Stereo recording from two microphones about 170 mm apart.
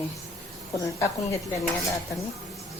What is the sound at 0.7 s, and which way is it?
Speech, 20° left (ahead or behind).